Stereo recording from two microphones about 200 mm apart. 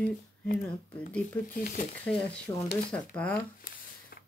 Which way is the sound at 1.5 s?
45° left (ahead or behind).